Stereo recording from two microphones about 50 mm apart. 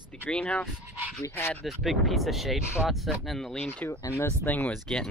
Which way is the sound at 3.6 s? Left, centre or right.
Left.